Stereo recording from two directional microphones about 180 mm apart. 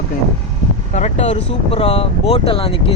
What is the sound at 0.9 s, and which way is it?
Speech, 40° left (ahead or behind).